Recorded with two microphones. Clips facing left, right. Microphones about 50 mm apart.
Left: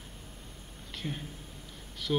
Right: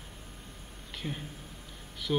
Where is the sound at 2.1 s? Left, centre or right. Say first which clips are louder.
Even; centre.